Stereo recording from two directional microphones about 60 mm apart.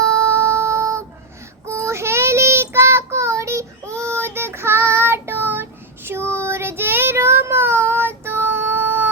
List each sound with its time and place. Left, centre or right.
0.0 s music: right
1.6 s child singing: right